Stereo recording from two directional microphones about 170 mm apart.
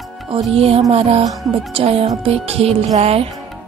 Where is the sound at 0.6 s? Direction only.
35° right (ahead or behind).